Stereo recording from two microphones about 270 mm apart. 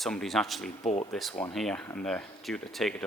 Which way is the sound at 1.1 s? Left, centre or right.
Centre.